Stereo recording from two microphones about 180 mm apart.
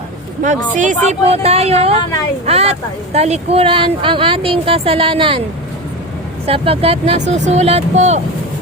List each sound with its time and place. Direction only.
0.4 s speech: 45° right (ahead or behind)
6.4 s speech: 30° right (ahead or behind)